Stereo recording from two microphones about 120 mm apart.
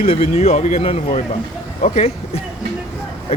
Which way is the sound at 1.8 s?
80° left.